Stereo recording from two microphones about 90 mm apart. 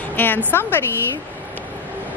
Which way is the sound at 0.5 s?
25° left (ahead or behind).